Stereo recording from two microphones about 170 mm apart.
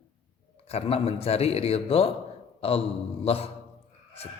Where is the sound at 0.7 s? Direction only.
35° left (ahead or behind).